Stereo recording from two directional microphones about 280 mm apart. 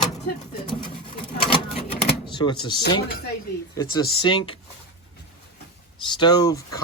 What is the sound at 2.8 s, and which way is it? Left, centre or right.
Speech, left.